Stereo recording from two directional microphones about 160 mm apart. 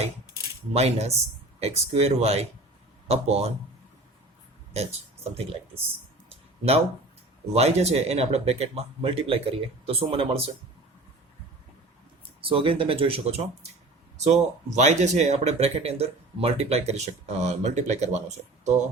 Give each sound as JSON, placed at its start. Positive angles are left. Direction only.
{"t": 0.7, "sound": "speech", "side_deg": -40}
{"t": 4.7, "sound": "speech", "side_deg": -40}
{"t": 6.2, "sound": "a sound", "side_deg": -40}
{"t": 7.5, "sound": "speech", "side_deg": -40}
{"t": 12.4, "sound": "speech", "side_deg": -35}